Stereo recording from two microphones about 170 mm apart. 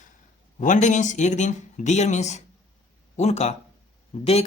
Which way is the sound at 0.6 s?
45° left (ahead or behind).